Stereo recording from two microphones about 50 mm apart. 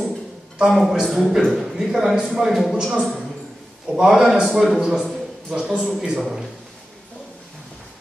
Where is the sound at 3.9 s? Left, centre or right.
Centre.